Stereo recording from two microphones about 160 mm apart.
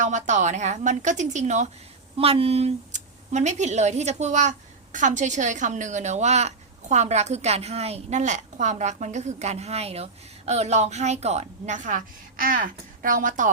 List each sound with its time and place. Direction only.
0.0 s speech: 50° right (ahead or behind)